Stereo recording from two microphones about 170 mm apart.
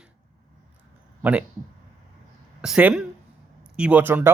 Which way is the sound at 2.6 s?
5° right (ahead or behind).